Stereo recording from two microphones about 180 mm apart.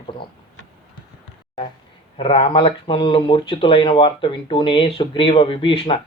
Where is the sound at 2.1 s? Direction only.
30° left (ahead or behind).